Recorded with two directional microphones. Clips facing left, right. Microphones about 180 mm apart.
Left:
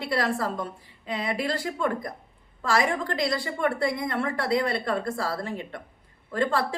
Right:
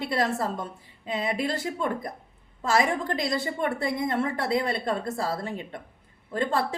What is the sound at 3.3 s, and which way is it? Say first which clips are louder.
A woman's voice: left 1 dB; 20° right (ahead or behind).